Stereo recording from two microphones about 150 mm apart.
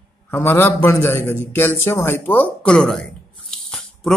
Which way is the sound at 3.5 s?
5° left (ahead or behind).